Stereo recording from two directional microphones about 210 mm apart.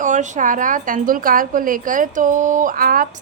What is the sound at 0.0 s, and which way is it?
A woman's voice, 35° right (ahead or behind).